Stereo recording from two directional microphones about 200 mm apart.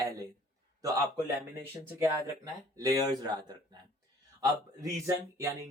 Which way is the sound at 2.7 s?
20° right (ahead or behind).